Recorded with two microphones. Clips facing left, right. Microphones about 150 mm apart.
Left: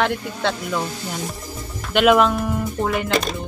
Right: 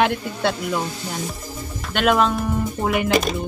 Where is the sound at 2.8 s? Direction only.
10° right (ahead or behind).